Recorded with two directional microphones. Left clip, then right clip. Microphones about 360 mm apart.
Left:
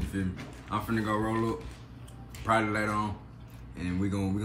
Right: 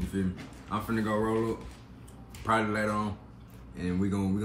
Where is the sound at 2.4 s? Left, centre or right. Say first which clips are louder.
Left 1 dB; centre.